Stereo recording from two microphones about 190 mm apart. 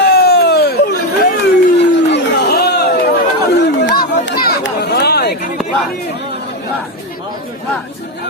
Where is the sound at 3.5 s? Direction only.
65° left (ahead or behind).